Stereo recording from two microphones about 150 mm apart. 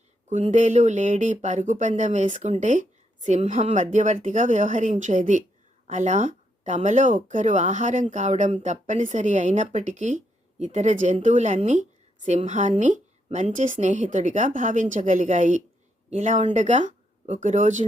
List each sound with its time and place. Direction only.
0.3 s speech: 55° right (ahead or behind)